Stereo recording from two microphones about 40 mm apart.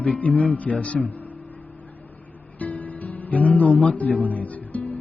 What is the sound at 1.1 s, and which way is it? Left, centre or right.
Music, left.